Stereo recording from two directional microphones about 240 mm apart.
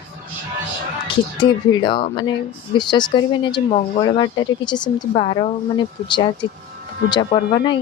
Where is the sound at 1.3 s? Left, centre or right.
Centre.